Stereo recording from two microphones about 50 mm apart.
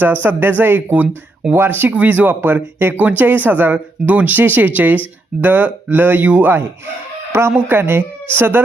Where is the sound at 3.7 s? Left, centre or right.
Right.